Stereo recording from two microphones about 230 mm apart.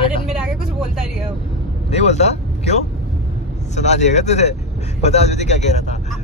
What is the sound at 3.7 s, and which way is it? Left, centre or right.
Speech, left.